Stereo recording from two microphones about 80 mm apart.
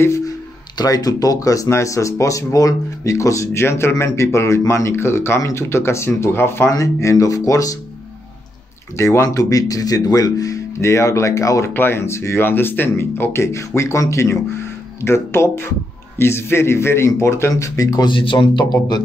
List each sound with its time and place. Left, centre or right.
0.0 s speech: left
0.7 s speech: left
6.7 s speech: left
8.9 s speech: left
11.7 s speech: left
18.0 s speech: left